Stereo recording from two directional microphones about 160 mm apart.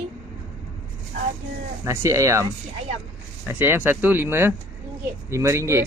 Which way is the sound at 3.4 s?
15° right (ahead or behind).